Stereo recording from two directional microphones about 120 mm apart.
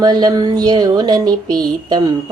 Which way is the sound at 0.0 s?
35° right (ahead or behind).